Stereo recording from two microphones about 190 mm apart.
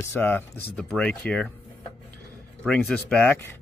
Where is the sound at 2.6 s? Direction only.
5° left (ahead or behind).